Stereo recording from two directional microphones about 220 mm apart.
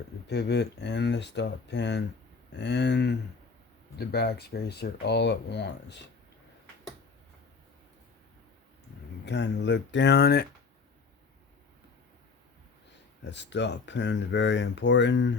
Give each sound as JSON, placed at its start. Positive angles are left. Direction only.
{"t": 0.3, "sound": "speech", "side_deg": 50}
{"t": 9.2, "sound": "speech", "side_deg": 50}
{"t": 13.2, "sound": "speech", "side_deg": 50}